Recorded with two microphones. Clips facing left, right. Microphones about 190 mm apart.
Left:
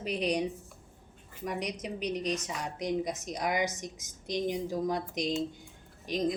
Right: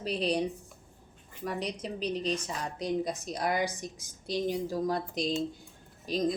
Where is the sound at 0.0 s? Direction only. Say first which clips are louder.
Right 1 dB; 15° left (ahead or behind).